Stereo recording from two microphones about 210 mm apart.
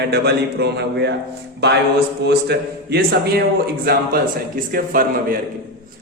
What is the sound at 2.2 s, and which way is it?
A man's voice, 50° right (ahead or behind).